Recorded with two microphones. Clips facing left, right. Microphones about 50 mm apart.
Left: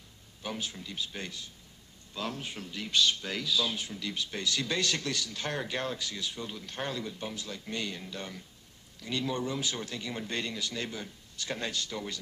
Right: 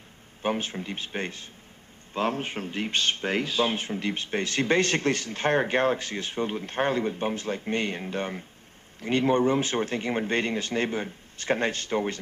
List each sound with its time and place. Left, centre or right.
0.4 s speech: right